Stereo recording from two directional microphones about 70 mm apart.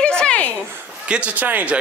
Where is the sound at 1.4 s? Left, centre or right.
Right.